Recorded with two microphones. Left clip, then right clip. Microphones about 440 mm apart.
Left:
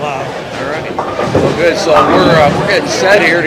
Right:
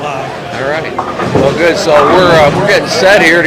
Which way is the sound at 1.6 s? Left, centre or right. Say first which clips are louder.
Right 1 dB; right.